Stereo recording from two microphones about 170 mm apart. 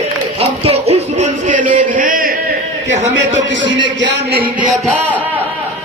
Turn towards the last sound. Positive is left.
turn(degrees=-90)